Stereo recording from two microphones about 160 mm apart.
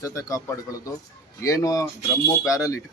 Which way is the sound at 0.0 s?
20° left (ahead or behind).